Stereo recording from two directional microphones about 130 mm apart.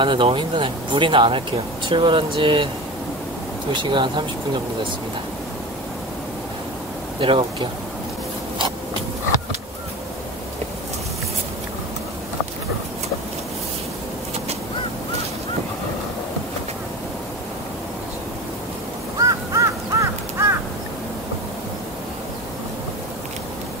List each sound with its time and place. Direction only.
0.0 s speech: 40° right (ahead or behind)
3.7 s speech: 40° right (ahead or behind)
7.2 s speech: 40° right (ahead or behind)
19.1 s crow: 25° right (ahead or behind)